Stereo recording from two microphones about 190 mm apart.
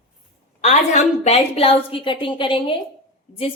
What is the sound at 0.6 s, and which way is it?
Speech, 35° left (ahead or behind).